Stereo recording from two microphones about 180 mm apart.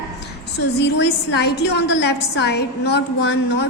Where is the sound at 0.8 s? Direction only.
75° left (ahead or behind).